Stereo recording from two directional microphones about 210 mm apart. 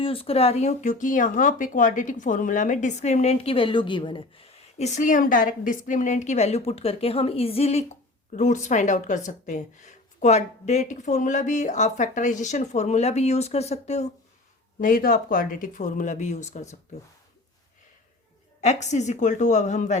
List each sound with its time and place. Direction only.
0.0 s speech: 25° left (ahead or behind)
14.8 s speech: 40° left (ahead or behind)
18.6 s speech: 35° left (ahead or behind)